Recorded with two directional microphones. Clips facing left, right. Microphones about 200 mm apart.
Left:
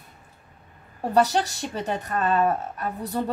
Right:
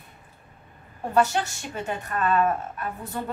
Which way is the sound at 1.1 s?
35° left (ahead or behind).